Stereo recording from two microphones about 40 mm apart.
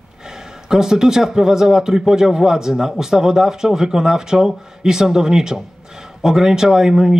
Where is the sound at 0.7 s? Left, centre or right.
Centre.